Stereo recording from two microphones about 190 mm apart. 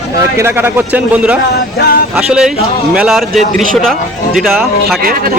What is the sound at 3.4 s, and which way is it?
Speech, 35° right (ahead or behind).